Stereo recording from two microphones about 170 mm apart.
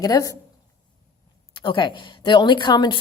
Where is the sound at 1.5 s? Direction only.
30° left (ahead or behind).